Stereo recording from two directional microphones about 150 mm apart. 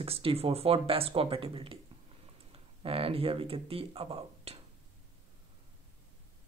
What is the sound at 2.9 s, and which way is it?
Speech, 40° right (ahead or behind).